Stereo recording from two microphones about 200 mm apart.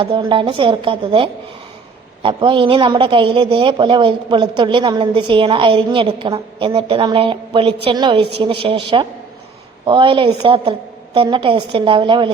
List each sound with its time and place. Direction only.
0.0 s a woman's voice: 25° right (ahead or behind)